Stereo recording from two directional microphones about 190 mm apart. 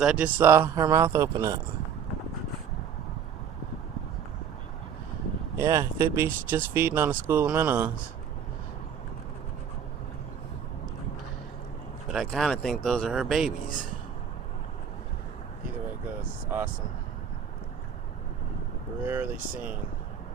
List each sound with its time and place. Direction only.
0.0 s speech: 5° right (ahead or behind)
5.6 s speech: 15° right (ahead or behind)
12.1 s speech: centre (ahead or behind)
19.0 s speech: 10° right (ahead or behind)